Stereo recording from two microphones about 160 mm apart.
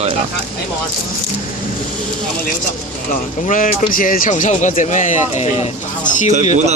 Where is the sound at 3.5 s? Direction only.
55° left (ahead or behind).